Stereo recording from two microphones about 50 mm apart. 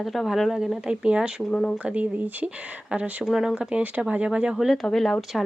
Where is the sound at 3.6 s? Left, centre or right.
Right.